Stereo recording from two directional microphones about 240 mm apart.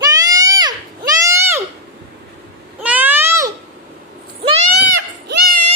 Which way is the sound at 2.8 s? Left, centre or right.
Centre.